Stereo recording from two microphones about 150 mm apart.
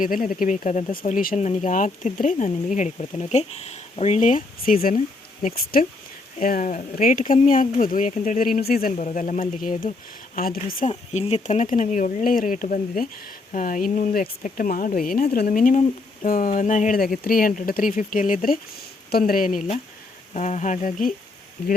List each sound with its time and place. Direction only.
0.0 s speech: 65° left (ahead or behind)
1.0 s speech: 65° left (ahead or behind)
1.4 s speech: 55° left (ahead or behind); by 5.9 s 80° left
6.4 s speech: 60° left (ahead or behind); by 8.9 s 80° left
9.0 s speech: 55° left (ahead or behind)
10.3 s speech: 75° left (ahead or behind)
10.8 s speech: 45° left (ahead or behind)